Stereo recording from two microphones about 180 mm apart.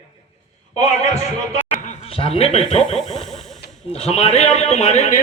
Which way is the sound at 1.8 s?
30° left (ahead or behind).